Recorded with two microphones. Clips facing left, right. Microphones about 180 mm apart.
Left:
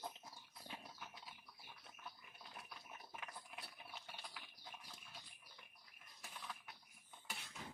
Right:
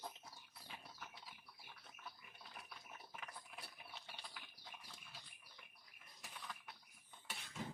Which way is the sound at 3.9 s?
Centre (ahead or behind).